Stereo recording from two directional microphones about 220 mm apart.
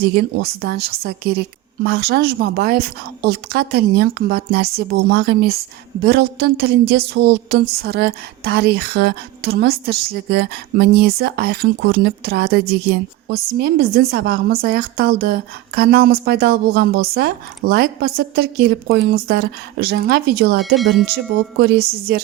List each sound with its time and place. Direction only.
0.0 s a woman's voice: 45° right (ahead or behind)
20.7 s speech: centre (ahead or behind)
21.6 s a woman's voice: 45° right (ahead or behind)